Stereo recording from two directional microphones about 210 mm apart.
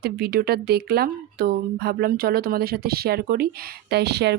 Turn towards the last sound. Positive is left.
turn(degrees=-50)  # may be behind; listen again after turning